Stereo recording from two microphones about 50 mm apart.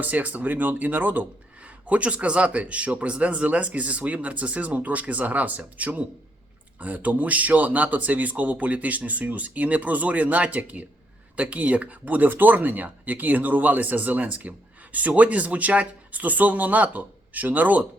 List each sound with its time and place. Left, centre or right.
0.0 s a man's voice: right